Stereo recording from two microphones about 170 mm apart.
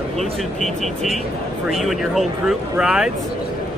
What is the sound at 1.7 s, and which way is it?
Speech, centre (ahead or behind).